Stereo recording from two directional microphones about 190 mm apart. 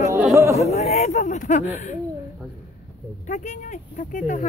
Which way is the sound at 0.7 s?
35° left (ahead or behind).